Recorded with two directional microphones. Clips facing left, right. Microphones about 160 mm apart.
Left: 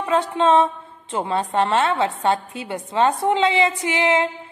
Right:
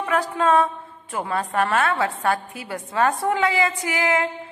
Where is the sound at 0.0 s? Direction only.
25° left (ahead or behind).